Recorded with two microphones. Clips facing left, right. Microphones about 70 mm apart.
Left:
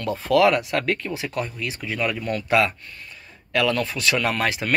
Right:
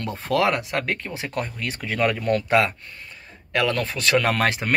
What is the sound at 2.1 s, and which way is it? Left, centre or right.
Speech, right.